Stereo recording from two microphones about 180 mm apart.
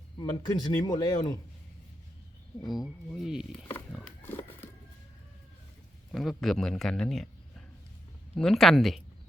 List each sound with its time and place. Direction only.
0.2 s speech: 20° left (ahead or behind)
2.6 s speech: centre (ahead or behind)
3.9 s pig: 10° left (ahead or behind)
6.1 s speech: centre (ahead or behind)
8.4 s speech: centre (ahead or behind)